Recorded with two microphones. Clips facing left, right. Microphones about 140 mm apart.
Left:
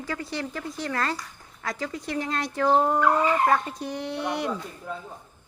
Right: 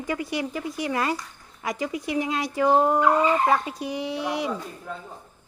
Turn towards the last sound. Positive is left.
turn(degrees=0)  # may be behind; listen again after turning